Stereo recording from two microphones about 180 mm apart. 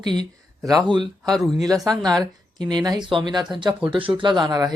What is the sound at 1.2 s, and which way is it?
Speech, centre (ahead or behind).